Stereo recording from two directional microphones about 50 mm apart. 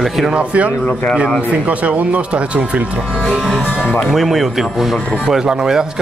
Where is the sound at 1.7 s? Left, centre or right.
Right.